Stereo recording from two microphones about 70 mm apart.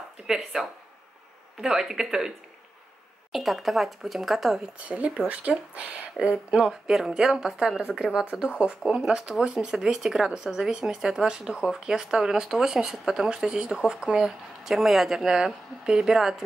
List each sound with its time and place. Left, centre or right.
0.3 s speech: centre
4.8 s speech: centre